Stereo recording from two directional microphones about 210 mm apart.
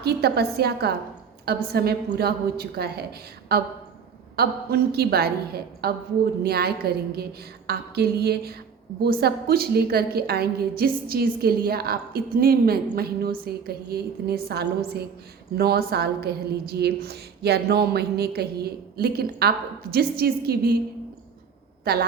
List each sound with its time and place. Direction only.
0.0 s a woman's voice: 50° right (ahead or behind)